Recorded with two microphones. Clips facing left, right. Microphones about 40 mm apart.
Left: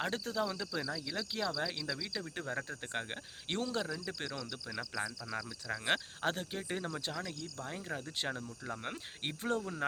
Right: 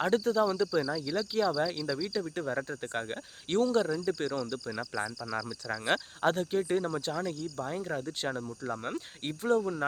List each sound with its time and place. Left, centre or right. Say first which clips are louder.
0.0 s speech: right 9 dB; centre
3.8 s speech: right 9 dB; centre
5.3 s speech: right 5 dB; centre
7.1 s speech: right 7 dB; centre
8.8 s speech: right 5 dB; centre
9.6 s speech: right 9 dB; centre